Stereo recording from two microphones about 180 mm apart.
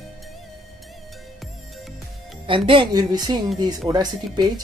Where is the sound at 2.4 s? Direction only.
30° right (ahead or behind).